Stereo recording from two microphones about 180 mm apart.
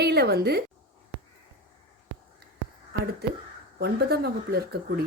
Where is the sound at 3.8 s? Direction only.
60° right (ahead or behind).